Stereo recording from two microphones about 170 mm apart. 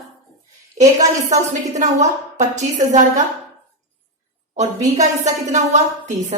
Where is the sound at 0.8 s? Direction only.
45° right (ahead or behind).